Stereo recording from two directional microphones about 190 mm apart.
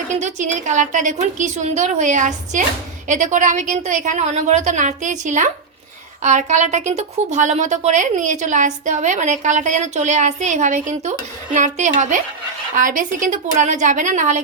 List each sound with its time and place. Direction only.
0.2 s a woman's voice: 40° right (ahead or behind)